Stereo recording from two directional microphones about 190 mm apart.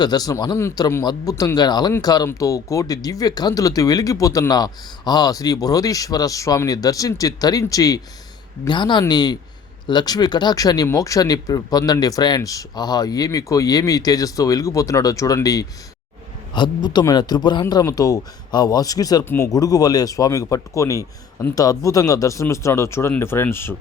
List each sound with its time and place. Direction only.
0.0 s speech: 20° left (ahead or behind)